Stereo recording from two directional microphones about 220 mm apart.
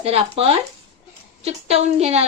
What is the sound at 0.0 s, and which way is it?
A woman's voice, 25° right (ahead or behind).